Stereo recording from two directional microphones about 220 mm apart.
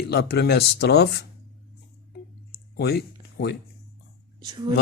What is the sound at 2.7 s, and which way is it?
Speech, 45° left (ahead or behind).